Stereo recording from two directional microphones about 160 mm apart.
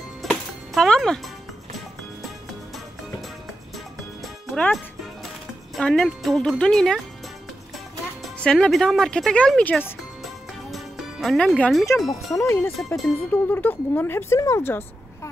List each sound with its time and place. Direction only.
0.2 s music: centre (ahead or behind)
4.5 s music: 5° left (ahead or behind)
5.8 s speech: 5° left (ahead or behind)
8.4 s speech: 5° left (ahead or behind)
10.2 s music: centre (ahead or behind)
12.1 s speech: 20° left (ahead or behind)
12.7 s speech: centre (ahead or behind)
13.3 s speech: 10° left (ahead or behind)